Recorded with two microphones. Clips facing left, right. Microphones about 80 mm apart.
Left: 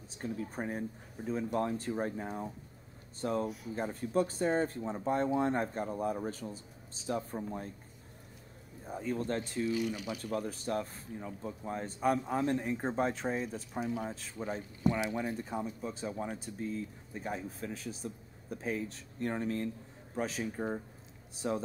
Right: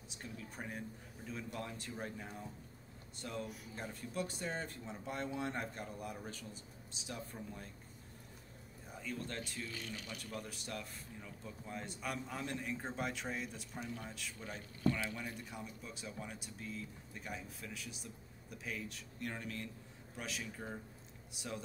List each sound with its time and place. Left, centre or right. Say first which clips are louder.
0.1 s speech: left 11 dB; left
8.8 s speech: left 10 dB; left
9.7 s speech: left 13 dB; centre
10.3 s speech: left 12 dB; left
13.7 s speech: left 10 dB; centre
14.0 s speech: left 9 dB; left
15.2 s speech: left 10 dB; left